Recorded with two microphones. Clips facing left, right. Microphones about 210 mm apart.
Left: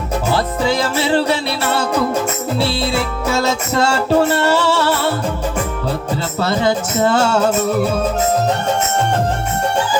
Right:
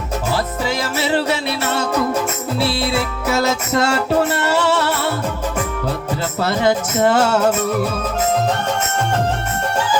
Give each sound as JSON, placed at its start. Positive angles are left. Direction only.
{"t": 0.3, "sound": "music", "side_deg": 30}
{"t": 6.4, "sound": "music", "side_deg": 30}